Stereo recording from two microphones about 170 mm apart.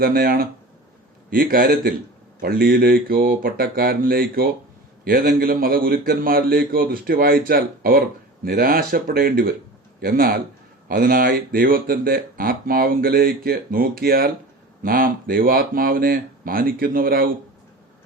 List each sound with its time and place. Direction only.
0.0 s speech: 60° right (ahead or behind)